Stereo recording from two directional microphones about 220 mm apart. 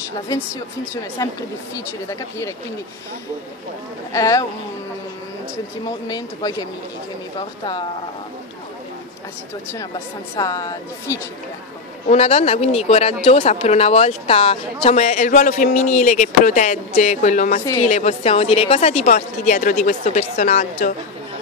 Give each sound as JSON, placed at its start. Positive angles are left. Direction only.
{"t": 1.2, "sound": "speech", "side_deg": 15}
{"t": 4.1, "sound": "speech", "side_deg": 15}
{"t": 5.9, "sound": "speech", "side_deg": 15}
{"t": 9.9, "sound": "speech", "side_deg": 20}
{"t": 12.1, "sound": "speech", "side_deg": 25}